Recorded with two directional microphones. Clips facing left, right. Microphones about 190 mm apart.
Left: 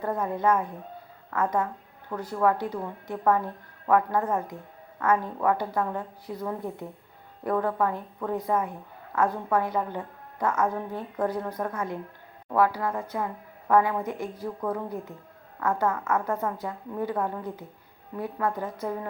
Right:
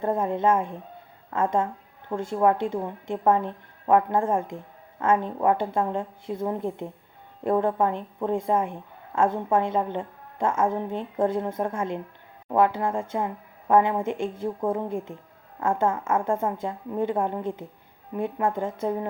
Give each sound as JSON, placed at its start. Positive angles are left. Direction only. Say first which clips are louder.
{"t": 0.0, "sound": "speech", "louder": "right 3 dB", "side_deg": -25}